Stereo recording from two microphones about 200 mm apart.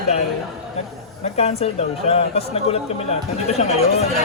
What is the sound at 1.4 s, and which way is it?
Speech, 30° left (ahead or behind).